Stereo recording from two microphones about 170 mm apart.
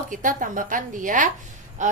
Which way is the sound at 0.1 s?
50° right (ahead or behind).